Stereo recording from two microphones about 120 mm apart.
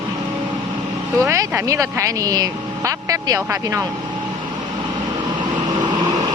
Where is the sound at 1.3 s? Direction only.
25° right (ahead or behind).